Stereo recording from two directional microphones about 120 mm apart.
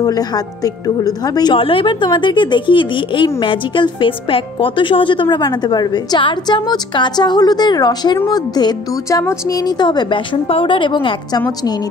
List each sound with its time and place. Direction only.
0.0 s speech: 30° left (ahead or behind)
1.6 s speech: 45° left (ahead or behind)